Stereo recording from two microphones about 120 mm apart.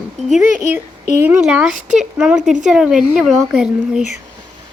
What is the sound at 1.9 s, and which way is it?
Speech, 5° right (ahead or behind).